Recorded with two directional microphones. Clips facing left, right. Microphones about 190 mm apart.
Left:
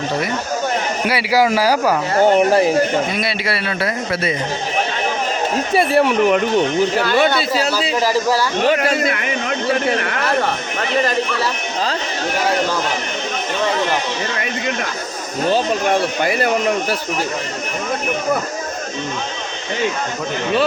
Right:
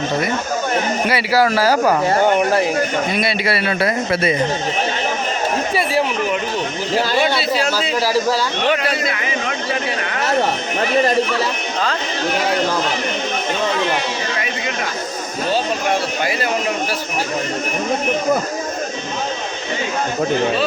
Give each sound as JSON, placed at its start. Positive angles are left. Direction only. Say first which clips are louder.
{"t": 1.0, "sound": "speech", "louder": "left 2 dB", "side_deg": 10}
{"t": 3.8, "sound": "speech", "louder": "right 3 dB", "side_deg": -20}
{"t": 5.7, "sound": "speech", "louder": "left 8 dB", "side_deg": 60}
{"t": 7.7, "sound": "speech", "louder": "left 1 dB", "side_deg": -10}
{"t": 8.6, "sound": "speech", "louder": "left 3 dB", "side_deg": 40}
{"t": 15.4, "sound": "speech", "louder": "left 3 dB", "side_deg": 50}